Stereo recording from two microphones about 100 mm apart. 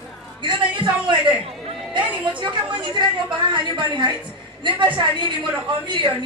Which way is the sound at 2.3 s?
55° right (ahead or behind).